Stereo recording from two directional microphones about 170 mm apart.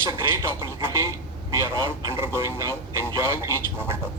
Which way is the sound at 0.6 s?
15° right (ahead or behind).